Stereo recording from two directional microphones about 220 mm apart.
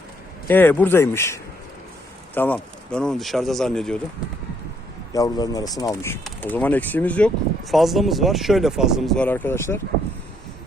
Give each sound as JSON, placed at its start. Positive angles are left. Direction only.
{"t": 0.4, "sound": "speech", "side_deg": 10}
{"t": 5.1, "sound": "speech", "side_deg": 15}